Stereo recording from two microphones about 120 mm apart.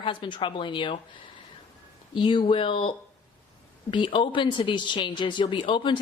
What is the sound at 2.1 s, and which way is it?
A woman's voice, 40° left (ahead or behind).